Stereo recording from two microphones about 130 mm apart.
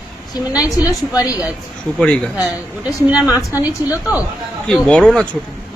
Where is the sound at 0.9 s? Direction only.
25° left (ahead or behind).